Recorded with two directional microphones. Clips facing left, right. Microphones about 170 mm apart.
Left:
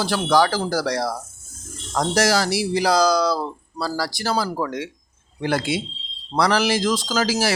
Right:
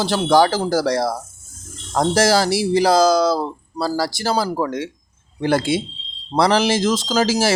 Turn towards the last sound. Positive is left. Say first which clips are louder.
# right 4 dB
turn(degrees=-25)  # may be behind; listen again after turning